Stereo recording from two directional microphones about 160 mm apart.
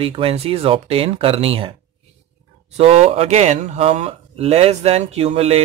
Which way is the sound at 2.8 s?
40° right (ahead or behind).